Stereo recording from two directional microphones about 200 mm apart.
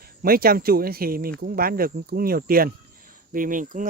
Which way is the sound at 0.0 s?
50° right (ahead or behind).